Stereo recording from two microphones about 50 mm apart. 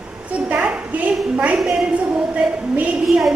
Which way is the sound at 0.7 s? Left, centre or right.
Right.